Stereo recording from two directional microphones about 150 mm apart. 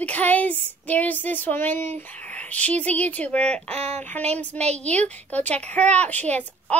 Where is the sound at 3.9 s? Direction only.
10° left (ahead or behind).